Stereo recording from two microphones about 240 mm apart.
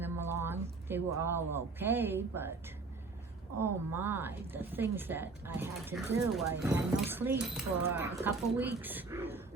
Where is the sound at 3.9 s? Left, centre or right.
Centre.